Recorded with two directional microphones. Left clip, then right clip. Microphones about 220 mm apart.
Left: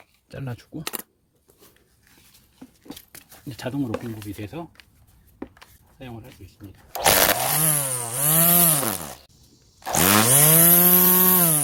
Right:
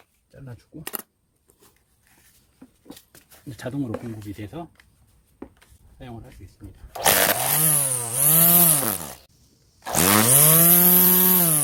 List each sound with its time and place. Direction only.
0.3 s speech: 45° left (ahead or behind)
3.2 s speech: 10° left (ahead or behind)
3.9 s speech: 35° left (ahead or behind)
4.4 s speech: 10° left (ahead or behind)
5.4 s a sound: 40° left (ahead or behind)
6.0 s speech: 15° left (ahead or behind)
7.0 s chainsaw: 10° left (ahead or behind)